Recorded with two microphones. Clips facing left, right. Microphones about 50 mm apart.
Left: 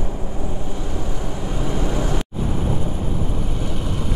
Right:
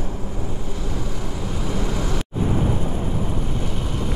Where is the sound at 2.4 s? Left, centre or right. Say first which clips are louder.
Right 5 dB; centre.